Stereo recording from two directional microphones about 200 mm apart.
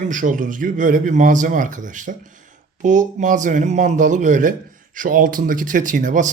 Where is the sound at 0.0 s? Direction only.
40° right (ahead or behind).